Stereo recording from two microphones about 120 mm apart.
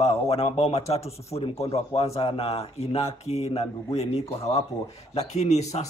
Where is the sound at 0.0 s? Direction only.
55° left (ahead or behind).